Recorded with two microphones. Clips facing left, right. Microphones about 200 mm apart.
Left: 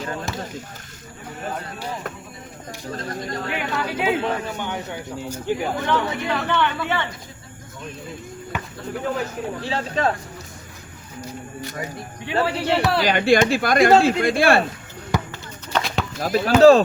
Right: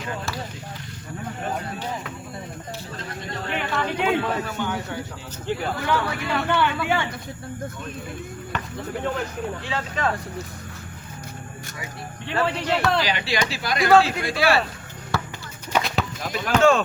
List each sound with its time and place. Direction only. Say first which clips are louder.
2.9 s speech: left 8 dB; 40° left (ahead or behind)
3.5 s speech: right 2 dB; 5° left (ahead or behind)
4.2 s speech: left 1 dB; 25° left (ahead or behind)
6.3 s speech: right 1 dB; 5° right (ahead or behind)
8.5 s a sound: even; 10° left (ahead or behind)
9.6 s speech: left 4 dB; 35° left (ahead or behind)
12.5 s speech: left 1 dB; 5° left (ahead or behind)
13.1 s speech: left 9 dB; 50° left (ahead or behind)
15.1 s a sound: left 3 dB; 15° left (ahead or behind)
15.7 s a sound: even; centre (ahead or behind)
16.2 s speech: left 7 dB; 35° left (ahead or behind)